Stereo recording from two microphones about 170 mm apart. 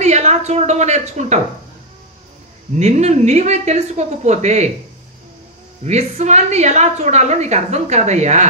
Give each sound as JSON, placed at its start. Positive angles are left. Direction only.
{"t": 0.0, "sound": "a woman's voice", "side_deg": -40}
{"t": 2.8, "sound": "a woman's voice", "side_deg": -40}
{"t": 5.9, "sound": "a woman's voice", "side_deg": -40}